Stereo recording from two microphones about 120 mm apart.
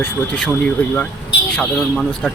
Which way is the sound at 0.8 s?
10° left (ahead or behind).